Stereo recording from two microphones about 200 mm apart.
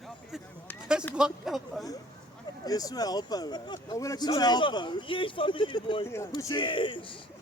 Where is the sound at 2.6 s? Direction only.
20° left (ahead or behind).